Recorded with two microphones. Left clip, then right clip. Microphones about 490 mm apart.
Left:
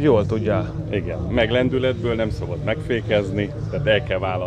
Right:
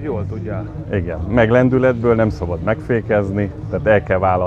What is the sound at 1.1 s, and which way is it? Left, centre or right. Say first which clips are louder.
Speech: right 6 dB; right.